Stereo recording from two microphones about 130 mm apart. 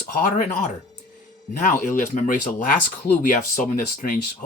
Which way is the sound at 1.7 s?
90° left.